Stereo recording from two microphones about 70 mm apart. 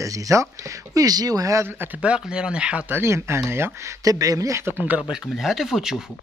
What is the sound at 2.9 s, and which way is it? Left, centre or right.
Speech, right.